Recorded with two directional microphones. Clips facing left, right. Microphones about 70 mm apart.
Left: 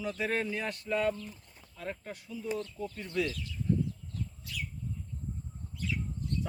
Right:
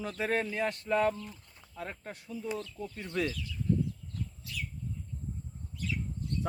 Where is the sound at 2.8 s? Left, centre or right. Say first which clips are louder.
Left 2 dB; left.